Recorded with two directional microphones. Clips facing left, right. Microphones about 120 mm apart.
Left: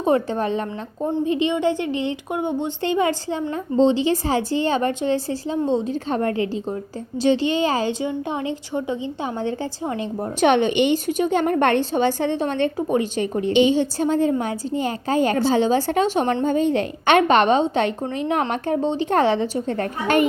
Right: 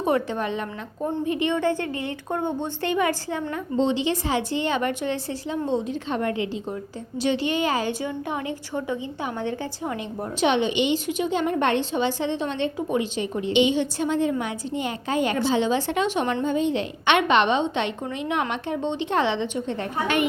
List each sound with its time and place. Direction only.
0.0 s a woman's voice: 30° left (ahead or behind)
1.0 s a woman's voice: 25° left (ahead or behind)
2.8 s a woman's voice: 25° left (ahead or behind)
10.4 s a woman's voice: 50° left (ahead or behind)